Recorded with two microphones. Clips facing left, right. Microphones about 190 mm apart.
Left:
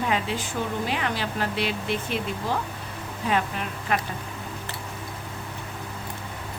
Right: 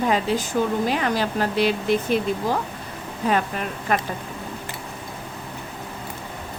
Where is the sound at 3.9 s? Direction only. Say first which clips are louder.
Right 3 dB; 45° right (ahead or behind).